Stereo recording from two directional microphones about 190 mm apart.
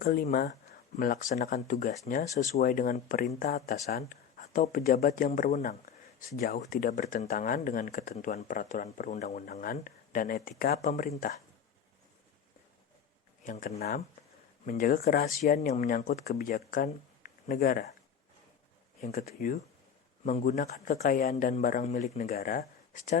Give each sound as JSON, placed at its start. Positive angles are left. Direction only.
{"t": 0.0, "sound": "speech", "side_deg": 50}
{"t": 0.3, "sound": "speech", "side_deg": 40}
{"t": 9.5, "sound": "speech", "side_deg": 50}
{"t": 13.4, "sound": "speech", "side_deg": 45}
{"t": 14.6, "sound": "speech", "side_deg": 40}
{"t": 19.1, "sound": "speech", "side_deg": 50}
{"t": 20.2, "sound": "speech", "side_deg": 40}
{"t": 20.6, "sound": "speech", "side_deg": 55}
{"t": 21.0, "sound": "speech", "side_deg": 40}